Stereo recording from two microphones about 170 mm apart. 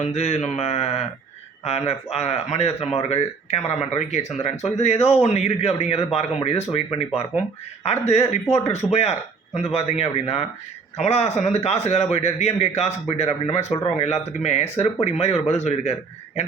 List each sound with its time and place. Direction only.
0.0 s a man's voice: 40° left (ahead or behind)